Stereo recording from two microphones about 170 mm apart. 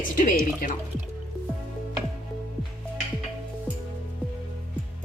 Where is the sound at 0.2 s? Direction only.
55° left (ahead or behind).